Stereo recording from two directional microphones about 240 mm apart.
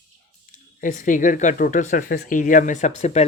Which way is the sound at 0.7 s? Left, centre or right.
Left.